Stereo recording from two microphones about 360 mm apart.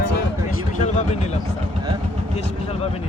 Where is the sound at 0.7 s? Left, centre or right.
Centre.